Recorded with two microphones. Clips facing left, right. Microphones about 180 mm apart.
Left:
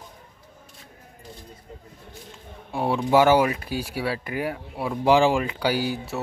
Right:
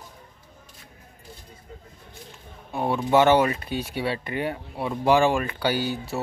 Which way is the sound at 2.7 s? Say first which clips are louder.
Left 1 dB; 10° left (ahead or behind).